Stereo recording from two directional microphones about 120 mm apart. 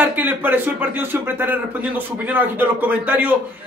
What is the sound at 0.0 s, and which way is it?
A man's voice, 15° right (ahead or behind).